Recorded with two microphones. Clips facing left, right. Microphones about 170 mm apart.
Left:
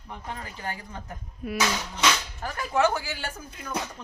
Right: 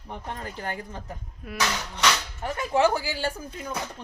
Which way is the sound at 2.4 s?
30° right (ahead or behind).